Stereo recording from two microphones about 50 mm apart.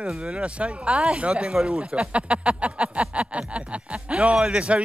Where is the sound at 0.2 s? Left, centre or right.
Right.